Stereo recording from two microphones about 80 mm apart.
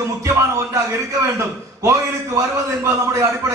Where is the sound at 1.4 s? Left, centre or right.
Right.